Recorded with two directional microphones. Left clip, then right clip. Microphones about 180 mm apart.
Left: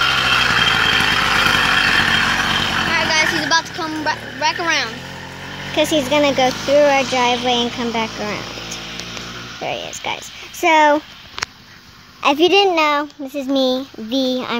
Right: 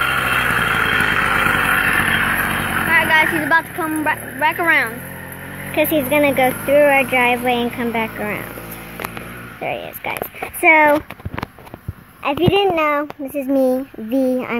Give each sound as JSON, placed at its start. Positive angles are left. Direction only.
{"t": 0.0, "sound": "vehicle", "side_deg": 15}
{"t": 2.9, "sound": "a sound", "side_deg": -10}
{"t": 3.4, "sound": "speech", "side_deg": -25}
{"t": 5.7, "sound": "speech", "side_deg": 5}
{"t": 9.6, "sound": "speech", "side_deg": 10}
{"t": 12.2, "sound": "a woman's voice", "side_deg": 50}
{"t": 12.5, "sound": "a child's voice", "side_deg": 25}
{"t": 13.4, "sound": "speech", "side_deg": 10}